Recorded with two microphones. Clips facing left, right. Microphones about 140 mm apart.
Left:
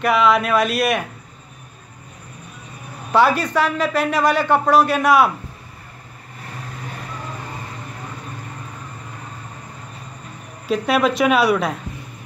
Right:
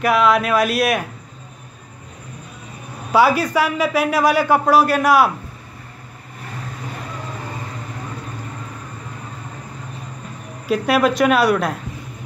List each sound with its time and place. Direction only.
0.0 s a man's voice: centre (ahead or behind)
3.1 s a man's voice: 5° right (ahead or behind)
10.7 s a man's voice: centre (ahead or behind)